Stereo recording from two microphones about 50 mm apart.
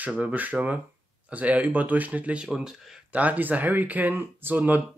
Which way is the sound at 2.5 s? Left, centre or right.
Centre.